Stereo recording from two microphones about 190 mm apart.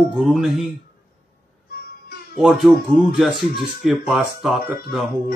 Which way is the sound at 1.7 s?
50° left (ahead or behind).